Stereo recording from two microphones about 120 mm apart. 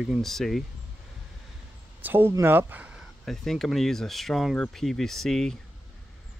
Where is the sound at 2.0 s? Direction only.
20° right (ahead or behind).